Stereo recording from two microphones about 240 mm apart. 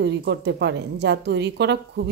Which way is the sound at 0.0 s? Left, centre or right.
Right.